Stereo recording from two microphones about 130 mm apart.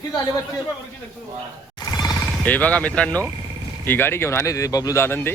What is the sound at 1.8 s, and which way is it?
Music, 30° left (ahead or behind).